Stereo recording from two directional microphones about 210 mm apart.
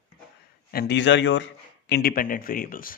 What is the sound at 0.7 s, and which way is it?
Speech, 50° left (ahead or behind).